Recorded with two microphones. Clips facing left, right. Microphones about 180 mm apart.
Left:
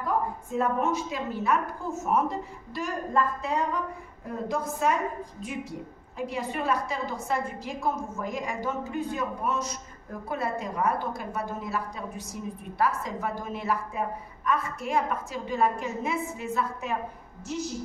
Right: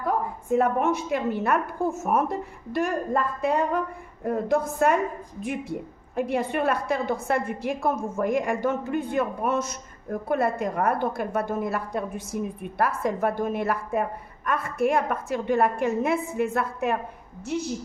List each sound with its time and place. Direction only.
0.0 s a woman's voice: 60° right (ahead or behind)